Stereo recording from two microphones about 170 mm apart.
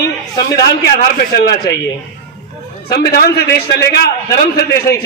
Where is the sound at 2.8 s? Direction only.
70° left (ahead or behind).